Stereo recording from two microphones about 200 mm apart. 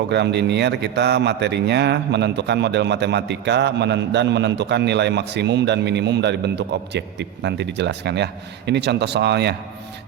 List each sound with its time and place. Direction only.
0.1 s a man's voice: 60° right (ahead or behind)